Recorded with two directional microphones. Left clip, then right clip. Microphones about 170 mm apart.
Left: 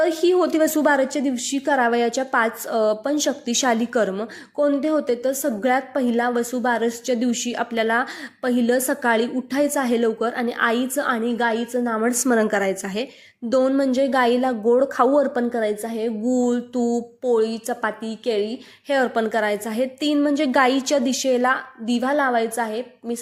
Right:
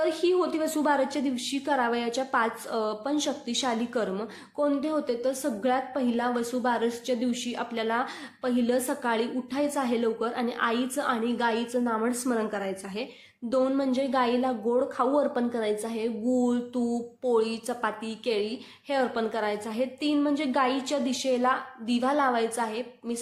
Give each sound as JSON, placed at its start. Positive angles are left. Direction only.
{"t": 0.0, "sound": "a woman's voice", "side_deg": 30}
{"t": 13.5, "sound": "a woman's voice", "side_deg": 30}